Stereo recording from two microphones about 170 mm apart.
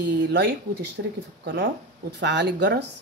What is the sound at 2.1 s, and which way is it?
Speech, 90° right.